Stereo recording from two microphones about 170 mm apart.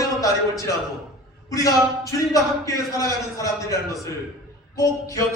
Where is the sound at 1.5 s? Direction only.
20° left (ahead or behind).